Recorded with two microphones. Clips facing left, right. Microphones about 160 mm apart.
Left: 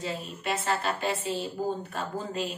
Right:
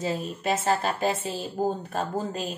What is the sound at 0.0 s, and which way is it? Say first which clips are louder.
Speech: right 5 dB; 45° right (ahead or behind).